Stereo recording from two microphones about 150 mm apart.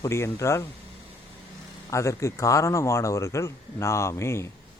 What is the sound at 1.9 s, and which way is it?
Speech, 20° left (ahead or behind).